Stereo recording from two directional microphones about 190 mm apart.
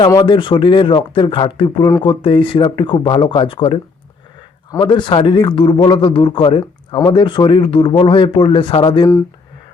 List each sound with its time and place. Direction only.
0.0 s speech: 20° left (ahead or behind)